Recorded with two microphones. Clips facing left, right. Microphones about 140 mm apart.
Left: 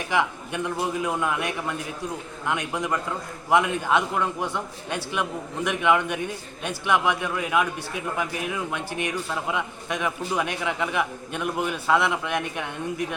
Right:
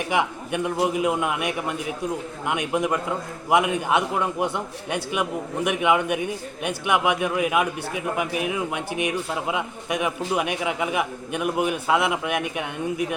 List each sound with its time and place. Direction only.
0.1 s a man's voice: 15° right (ahead or behind)